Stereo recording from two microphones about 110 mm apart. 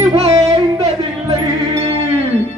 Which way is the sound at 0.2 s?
70° right (ahead or behind).